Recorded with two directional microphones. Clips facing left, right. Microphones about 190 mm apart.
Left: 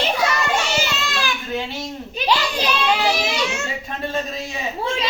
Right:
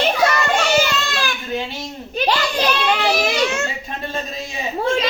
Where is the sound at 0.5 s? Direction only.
55° right (ahead or behind).